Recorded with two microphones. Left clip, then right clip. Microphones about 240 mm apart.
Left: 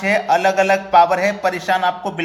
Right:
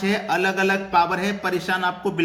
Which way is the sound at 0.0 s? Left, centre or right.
Centre.